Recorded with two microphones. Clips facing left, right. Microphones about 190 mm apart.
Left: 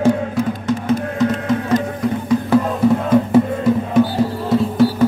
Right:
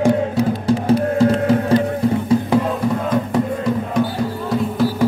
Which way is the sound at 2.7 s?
5° left (ahead or behind).